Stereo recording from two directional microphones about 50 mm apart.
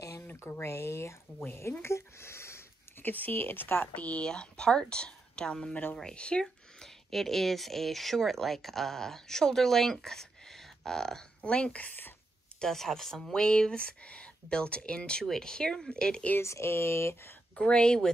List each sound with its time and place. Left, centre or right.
0.5 s speech: left
3.0 s speech: left
3.9 s a woman's voice: left
4.3 s a woman's voice: centre
6.4 s speech: centre
11.5 s a woman's voice: left
12.5 s speech: centre
16.3 s speech: left
17.6 s speech: centre